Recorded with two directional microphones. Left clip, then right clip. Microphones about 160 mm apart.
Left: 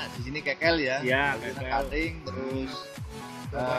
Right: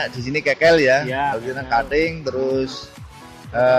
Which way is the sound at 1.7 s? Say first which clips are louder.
Right 11 dB; 70° right (ahead or behind).